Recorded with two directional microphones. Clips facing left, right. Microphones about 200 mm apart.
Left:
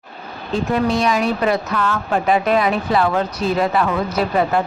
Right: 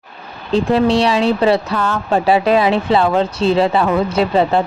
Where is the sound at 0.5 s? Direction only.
30° right (ahead or behind).